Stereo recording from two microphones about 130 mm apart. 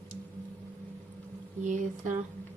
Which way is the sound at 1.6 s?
70° right (ahead or behind).